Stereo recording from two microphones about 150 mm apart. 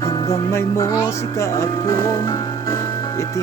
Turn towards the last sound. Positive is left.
turn(degrees=20)  # may be behind; listen again after turning